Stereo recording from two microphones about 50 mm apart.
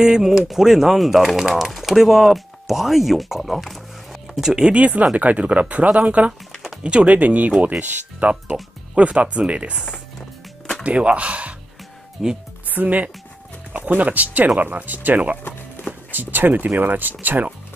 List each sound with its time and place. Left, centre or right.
0.0 s speech: centre
4.7 s speech: right
6.5 s a sound: centre
6.8 s speech: right
10.8 s speech: right
12.2 s speech: centre
12.6 s speech: right